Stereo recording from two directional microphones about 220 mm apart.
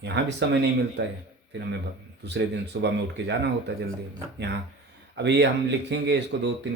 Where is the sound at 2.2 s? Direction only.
50° right (ahead or behind).